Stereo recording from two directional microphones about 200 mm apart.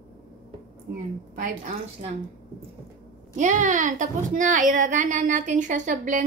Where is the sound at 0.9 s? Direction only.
45° right (ahead or behind).